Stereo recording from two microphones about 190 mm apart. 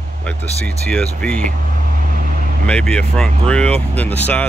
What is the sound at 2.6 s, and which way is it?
Speech, 5° left (ahead or behind).